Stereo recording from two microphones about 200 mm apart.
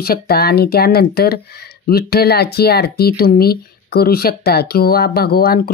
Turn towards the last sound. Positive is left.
turn(degrees=50)  # may be behind; listen again after turning